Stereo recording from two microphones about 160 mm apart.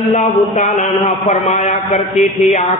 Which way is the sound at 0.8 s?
35° left (ahead or behind).